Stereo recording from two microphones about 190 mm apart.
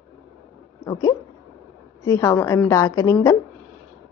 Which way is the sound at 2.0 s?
15° left (ahead or behind).